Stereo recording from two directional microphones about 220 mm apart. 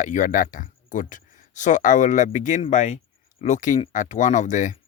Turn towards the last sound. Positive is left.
turn(degrees=35)  # may be behind; listen again after turning